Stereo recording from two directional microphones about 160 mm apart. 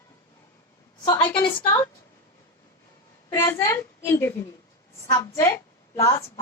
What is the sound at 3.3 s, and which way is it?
A woman's voice, 20° left (ahead or behind).